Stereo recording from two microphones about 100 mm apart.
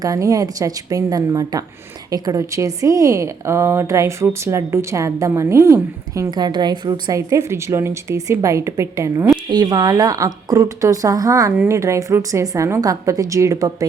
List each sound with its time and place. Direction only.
0.0 s a woman's voice: 35° right (ahead or behind)
6.3 s a woman's voice: 45° right (ahead or behind)
7.2 s a woman's voice: 30° right (ahead or behind)
9.5 s a woman's voice: 40° right (ahead or behind)